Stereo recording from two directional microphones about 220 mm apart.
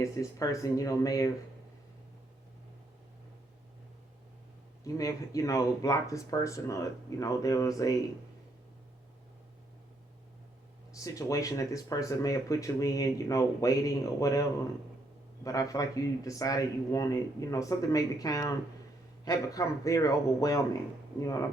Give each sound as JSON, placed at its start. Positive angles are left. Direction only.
{"t": 0.0, "sound": "speech", "side_deg": 15}
{"t": 4.8, "sound": "speech", "side_deg": 15}
{"t": 10.9, "sound": "speech", "side_deg": 15}
{"t": 15.4, "sound": "speech", "side_deg": 15}